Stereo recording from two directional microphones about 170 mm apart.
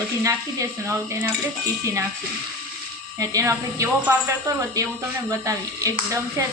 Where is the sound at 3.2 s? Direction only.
20° right (ahead or behind).